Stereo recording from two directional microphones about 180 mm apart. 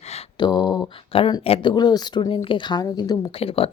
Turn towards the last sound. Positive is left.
turn(degrees=30)  # may be behind; listen again after turning